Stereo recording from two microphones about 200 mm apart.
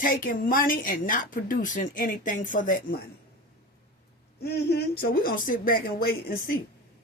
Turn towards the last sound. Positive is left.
turn(degrees=45)  # may be behind; listen again after turning